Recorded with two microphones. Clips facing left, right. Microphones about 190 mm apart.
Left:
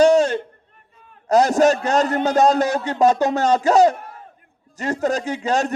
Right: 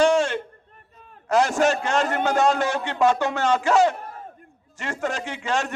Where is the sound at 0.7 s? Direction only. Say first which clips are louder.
Right 2 dB; 40° right (ahead or behind).